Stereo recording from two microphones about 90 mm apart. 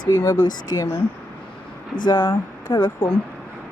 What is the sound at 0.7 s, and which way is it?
Speech, 35° left (ahead or behind).